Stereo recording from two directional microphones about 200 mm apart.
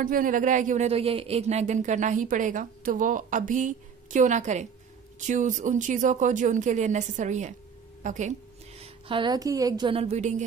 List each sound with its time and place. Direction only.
0.0 s a woman's voice: 40° right (ahead or behind)
8.8 s a woman's voice: 25° right (ahead or behind)